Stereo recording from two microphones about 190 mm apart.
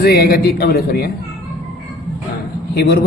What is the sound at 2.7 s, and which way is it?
Speech, 60° left (ahead or behind).